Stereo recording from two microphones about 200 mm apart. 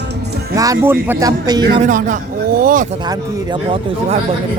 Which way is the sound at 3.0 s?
20° right (ahead or behind).